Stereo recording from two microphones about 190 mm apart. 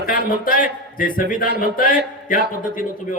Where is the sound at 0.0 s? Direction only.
50° left (ahead or behind).